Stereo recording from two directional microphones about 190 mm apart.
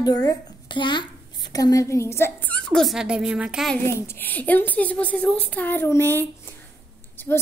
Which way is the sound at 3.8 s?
15° left (ahead or behind).